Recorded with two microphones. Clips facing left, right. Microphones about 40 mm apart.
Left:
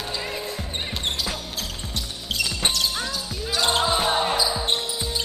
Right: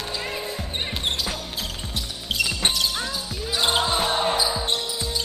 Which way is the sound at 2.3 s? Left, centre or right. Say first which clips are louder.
Right 1 dB; centre.